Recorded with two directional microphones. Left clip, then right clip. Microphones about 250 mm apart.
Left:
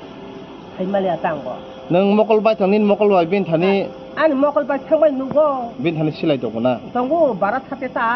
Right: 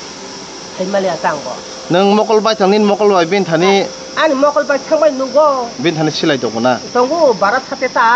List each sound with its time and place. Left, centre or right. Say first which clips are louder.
0.9 s speech: right 4 dB; right